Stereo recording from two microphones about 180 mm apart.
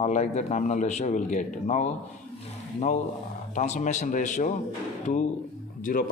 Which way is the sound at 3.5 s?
45° left (ahead or behind).